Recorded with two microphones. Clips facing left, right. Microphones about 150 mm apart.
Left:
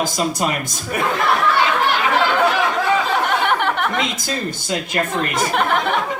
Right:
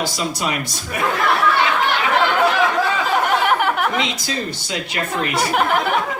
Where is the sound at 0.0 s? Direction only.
45° left (ahead or behind).